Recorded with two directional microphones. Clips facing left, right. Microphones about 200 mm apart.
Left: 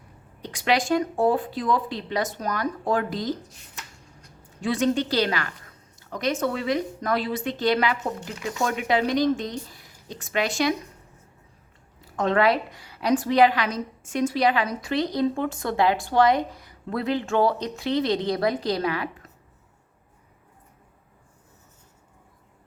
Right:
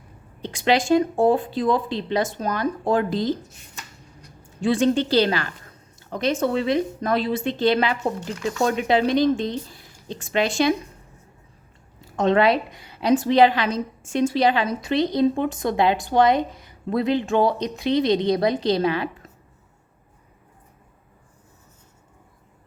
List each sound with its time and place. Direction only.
0.4 s a woman's voice: 25° right (ahead or behind)
4.2 s a sound: 30° right (ahead or behind)
6.4 s a woman's voice: 25° right (ahead or behind)
12.0 s a woman's voice: 20° right (ahead or behind)